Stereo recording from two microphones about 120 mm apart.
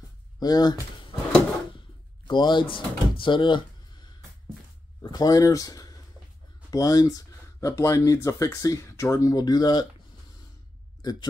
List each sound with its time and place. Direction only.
0.4 s speech: 35° left (ahead or behind)
2.2 s speech: 40° left (ahead or behind)
5.1 s speech: 30° left (ahead or behind)
11.0 s speech: 35° left (ahead or behind)